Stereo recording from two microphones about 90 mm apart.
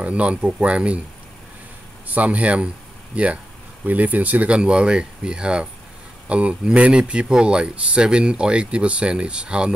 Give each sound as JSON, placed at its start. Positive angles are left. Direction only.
{"t": 0.0, "sound": "speech", "side_deg": -15}
{"t": 2.0, "sound": "speech", "side_deg": -15}